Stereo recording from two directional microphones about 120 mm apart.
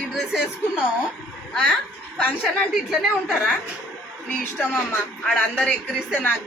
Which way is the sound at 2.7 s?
Centre (ahead or behind).